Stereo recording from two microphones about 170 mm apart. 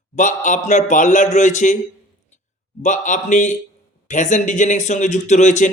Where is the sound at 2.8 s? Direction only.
45° left (ahead or behind).